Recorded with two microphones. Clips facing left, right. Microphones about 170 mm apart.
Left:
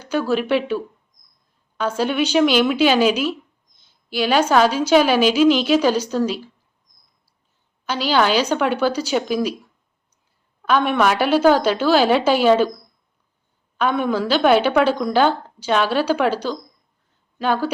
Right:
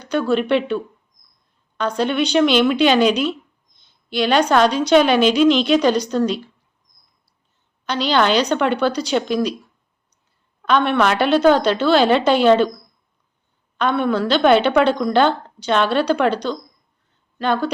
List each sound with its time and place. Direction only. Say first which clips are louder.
0.0 s a woman's voice: right 2 dB; 5° left (ahead or behind)
1.8 s a woman's voice: right 1 dB; 5° left (ahead or behind)
7.9 s a woman's voice: right 1 dB; 5° left (ahead or behind)
10.6 s a woman's voice: right 1 dB; 10° left (ahead or behind)